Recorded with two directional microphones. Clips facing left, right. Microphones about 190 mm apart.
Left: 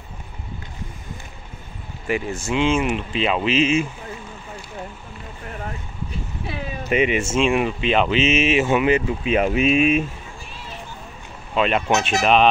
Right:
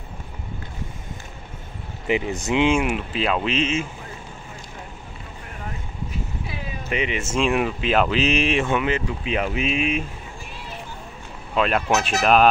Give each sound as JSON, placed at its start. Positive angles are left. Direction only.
{"t": 2.0, "sound": "speech", "side_deg": -20}
{"t": 6.9, "sound": "speech", "side_deg": 15}
{"t": 7.3, "sound": "speech", "side_deg": 0}
{"t": 11.5, "sound": "speech", "side_deg": 0}